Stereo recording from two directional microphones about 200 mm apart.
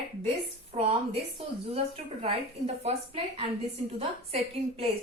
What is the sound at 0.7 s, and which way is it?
A woman's voice, 30° right (ahead or behind).